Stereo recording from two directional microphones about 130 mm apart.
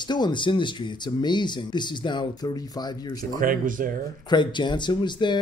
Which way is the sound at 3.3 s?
90° right.